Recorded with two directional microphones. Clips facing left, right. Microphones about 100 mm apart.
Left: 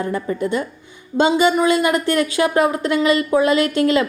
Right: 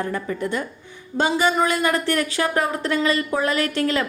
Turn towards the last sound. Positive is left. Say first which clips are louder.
# left 6 dB
turn(degrees=20)  # may be behind; listen again after turning